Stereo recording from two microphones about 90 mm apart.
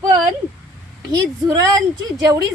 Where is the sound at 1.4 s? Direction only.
45° right (ahead or behind).